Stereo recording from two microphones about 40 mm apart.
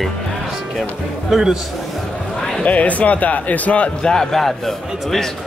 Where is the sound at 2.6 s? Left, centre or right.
Left.